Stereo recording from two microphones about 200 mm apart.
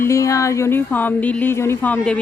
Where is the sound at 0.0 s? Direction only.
15° left (ahead or behind).